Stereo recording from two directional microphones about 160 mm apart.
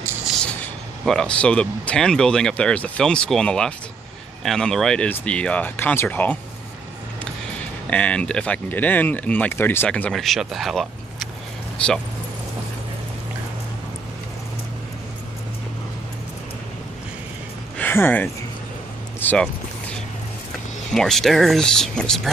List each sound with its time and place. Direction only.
0.4 s speech: 5° left (ahead or behind)
7.9 s speech: 5° left (ahead or behind)
17.7 s speech: 15° left (ahead or behind)
19.1 s boat: 10° left (ahead or behind)
20.9 s speech: 5° left (ahead or behind)